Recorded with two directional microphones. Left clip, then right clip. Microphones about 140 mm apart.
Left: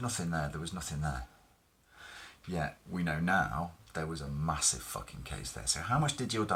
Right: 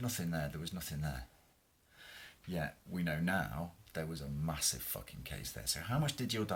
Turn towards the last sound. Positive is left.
turn(degrees=-35)  # may be behind; listen again after turning